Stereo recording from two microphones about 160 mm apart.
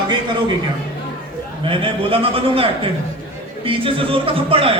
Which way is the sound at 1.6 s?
35° right (ahead or behind).